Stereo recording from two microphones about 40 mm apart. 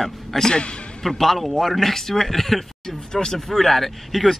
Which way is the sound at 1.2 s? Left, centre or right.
Centre.